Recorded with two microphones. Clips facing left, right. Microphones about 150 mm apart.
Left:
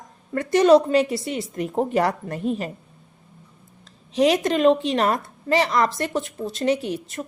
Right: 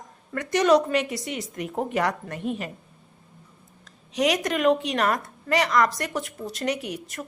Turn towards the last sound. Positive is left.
turn(degrees=25)  # may be behind; listen again after turning